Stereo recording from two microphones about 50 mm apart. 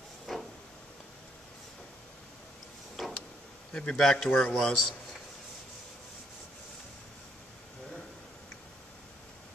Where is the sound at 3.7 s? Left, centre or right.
Centre.